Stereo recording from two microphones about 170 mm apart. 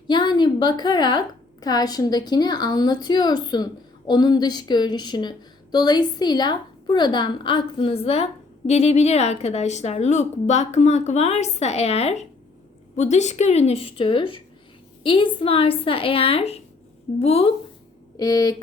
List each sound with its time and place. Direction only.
0.1 s a woman's voice: 25° left (ahead or behind)
18.2 s a woman's voice: 25° left (ahead or behind)